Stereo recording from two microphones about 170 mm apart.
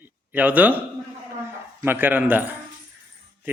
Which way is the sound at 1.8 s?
10° right (ahead or behind).